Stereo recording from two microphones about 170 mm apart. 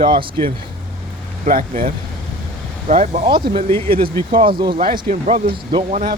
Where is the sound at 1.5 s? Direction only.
55° right (ahead or behind).